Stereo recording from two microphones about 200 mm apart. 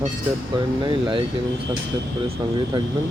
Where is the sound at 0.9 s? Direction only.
25° right (ahead or behind).